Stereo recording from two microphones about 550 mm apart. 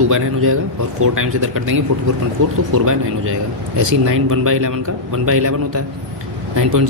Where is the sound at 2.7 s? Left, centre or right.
Right.